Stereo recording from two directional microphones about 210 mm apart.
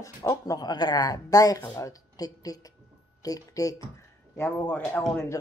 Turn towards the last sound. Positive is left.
turn(degrees=10)  # may be behind; listen again after turning